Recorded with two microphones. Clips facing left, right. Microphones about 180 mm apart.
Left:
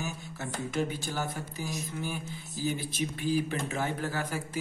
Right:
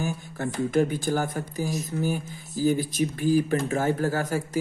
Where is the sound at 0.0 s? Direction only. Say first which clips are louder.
Right 8 dB; 50° right (ahead or behind).